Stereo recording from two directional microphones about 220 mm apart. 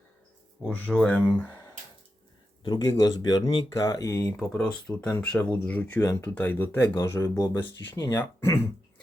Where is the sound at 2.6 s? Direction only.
20° left (ahead or behind).